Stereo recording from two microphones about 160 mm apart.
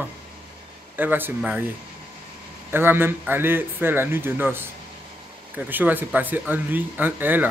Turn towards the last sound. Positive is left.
turn(degrees=-10)  # may be behind; listen again after turning